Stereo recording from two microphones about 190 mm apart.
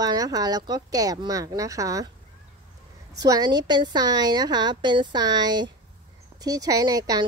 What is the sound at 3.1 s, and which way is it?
A woman's voice, 20° right (ahead or behind).